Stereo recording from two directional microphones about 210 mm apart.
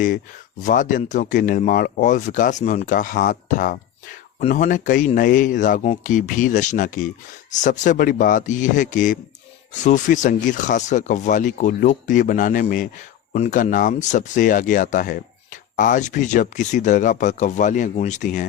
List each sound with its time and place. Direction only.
0.6 s speech: 40° left (ahead or behind)